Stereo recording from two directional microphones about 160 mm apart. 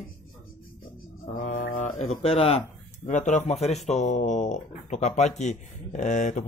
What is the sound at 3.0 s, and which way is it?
Speech, 50° left (ahead or behind).